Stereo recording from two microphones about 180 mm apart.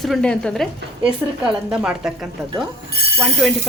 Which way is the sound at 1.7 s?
5° right (ahead or behind).